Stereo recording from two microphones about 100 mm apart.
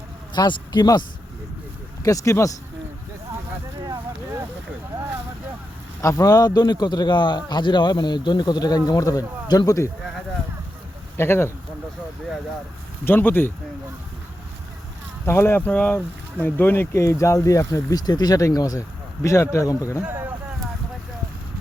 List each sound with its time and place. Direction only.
0.3 s a man's voice: 45° left (ahead or behind)
2.0 s speech: 30° left (ahead or behind)
6.0 s a man's voice: 30° left (ahead or behind)
11.2 s speech: 25° left (ahead or behind)
13.1 s speech: 20° left (ahead or behind)
15.3 s speech: 25° left (ahead or behind)
20.1 s a sound: 20° right (ahead or behind)